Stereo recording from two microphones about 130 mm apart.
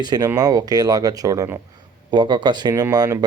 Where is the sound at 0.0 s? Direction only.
30° right (ahead or behind).